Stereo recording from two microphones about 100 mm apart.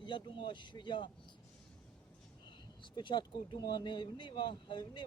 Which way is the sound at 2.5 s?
50° left (ahead or behind).